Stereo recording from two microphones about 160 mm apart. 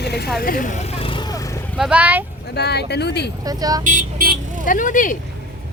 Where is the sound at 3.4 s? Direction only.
25° right (ahead or behind).